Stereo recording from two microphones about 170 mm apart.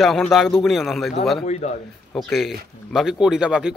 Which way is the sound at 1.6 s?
40° left (ahead or behind).